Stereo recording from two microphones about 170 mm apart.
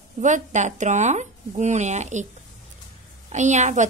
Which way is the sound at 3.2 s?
45° right (ahead or behind).